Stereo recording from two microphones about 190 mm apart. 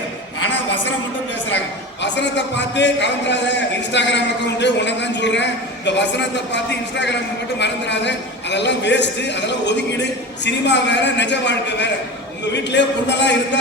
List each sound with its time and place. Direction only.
2.0 s a man's voice: 65° left (ahead or behind)